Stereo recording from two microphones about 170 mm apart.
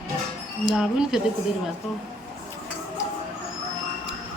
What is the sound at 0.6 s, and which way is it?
Speech, centre (ahead or behind).